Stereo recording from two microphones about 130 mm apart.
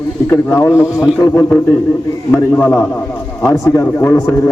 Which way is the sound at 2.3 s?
15° left (ahead or behind).